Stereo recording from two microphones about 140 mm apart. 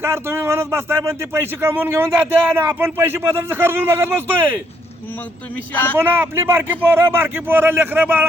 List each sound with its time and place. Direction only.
0.0 s speech: 15° right (ahead or behind)
5.7 s speech: 10° left (ahead or behind)
6.0 s speech: 15° right (ahead or behind)